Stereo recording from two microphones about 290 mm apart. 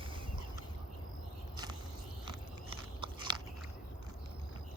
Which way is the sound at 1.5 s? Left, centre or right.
Centre.